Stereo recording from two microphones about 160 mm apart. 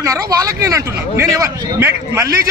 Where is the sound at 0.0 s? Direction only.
20° right (ahead or behind).